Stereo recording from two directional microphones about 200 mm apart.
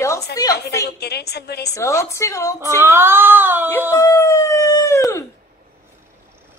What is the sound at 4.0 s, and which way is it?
Howl, 15° left (ahead or behind).